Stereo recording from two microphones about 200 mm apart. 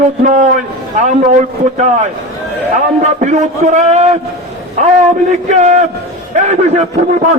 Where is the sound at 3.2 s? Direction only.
35° right (ahead or behind).